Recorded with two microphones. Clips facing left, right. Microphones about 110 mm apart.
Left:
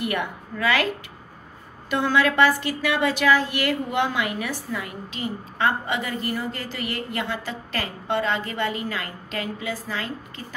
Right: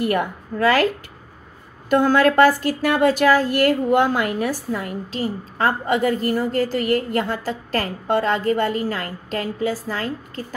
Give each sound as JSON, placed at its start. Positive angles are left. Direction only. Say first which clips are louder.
{"t": 0.0, "sound": "speech", "louder": "right 6 dB", "side_deg": -40}
{"t": 1.9, "sound": "speech", "louder": "right 6 dB", "side_deg": -45}